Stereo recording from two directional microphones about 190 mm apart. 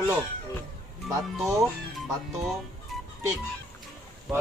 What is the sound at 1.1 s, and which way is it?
Speech, 15° right (ahead or behind).